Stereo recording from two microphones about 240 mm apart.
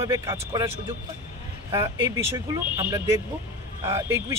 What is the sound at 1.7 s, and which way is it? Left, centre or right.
A man's voice, centre.